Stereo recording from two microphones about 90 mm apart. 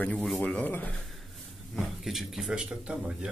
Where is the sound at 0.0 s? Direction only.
15° left (ahead or behind).